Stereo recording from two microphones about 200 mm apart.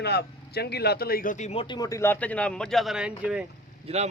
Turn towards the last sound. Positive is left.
turn(degrees=-30)  # may be behind; listen again after turning